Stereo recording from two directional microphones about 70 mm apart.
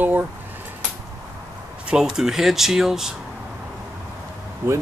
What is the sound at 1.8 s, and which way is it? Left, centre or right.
Speech, centre.